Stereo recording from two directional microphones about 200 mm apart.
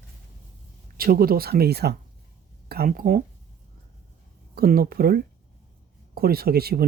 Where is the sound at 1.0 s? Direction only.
50° right (ahead or behind).